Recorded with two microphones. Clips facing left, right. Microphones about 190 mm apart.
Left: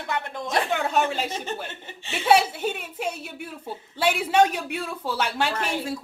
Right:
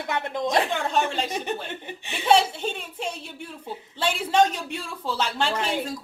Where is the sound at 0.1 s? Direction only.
20° right (ahead or behind).